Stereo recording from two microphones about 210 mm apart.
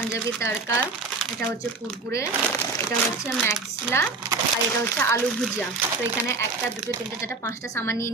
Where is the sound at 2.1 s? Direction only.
10° left (ahead or behind).